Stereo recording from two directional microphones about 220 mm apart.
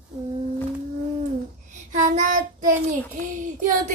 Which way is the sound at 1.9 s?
35° right (ahead or behind).